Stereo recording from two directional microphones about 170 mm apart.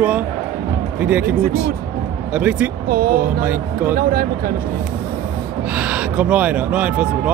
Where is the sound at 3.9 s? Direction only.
60° right (ahead or behind).